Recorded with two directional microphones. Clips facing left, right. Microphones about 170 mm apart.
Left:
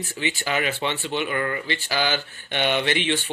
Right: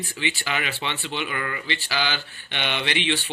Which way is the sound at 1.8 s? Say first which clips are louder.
Left 3 dB; 45° left (ahead or behind).